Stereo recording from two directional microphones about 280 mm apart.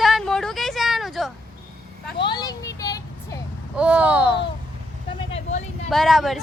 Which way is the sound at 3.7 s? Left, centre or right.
Centre.